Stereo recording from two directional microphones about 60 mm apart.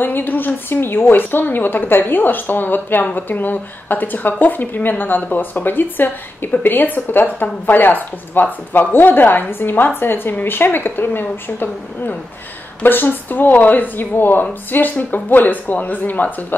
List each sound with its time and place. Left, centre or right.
0.0 s speech: left